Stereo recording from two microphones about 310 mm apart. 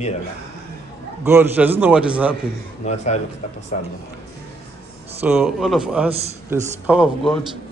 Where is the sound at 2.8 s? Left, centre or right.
Left.